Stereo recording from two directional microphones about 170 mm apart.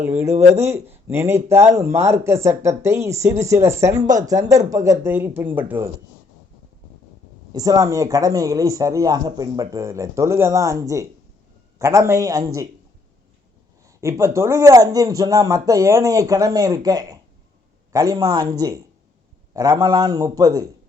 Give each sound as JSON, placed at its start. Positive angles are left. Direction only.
{"t": 0.0, "sound": "speech", "side_deg": -15}
{"t": 7.5, "sound": "speech", "side_deg": -20}
{"t": 13.8, "sound": "speech", "side_deg": -15}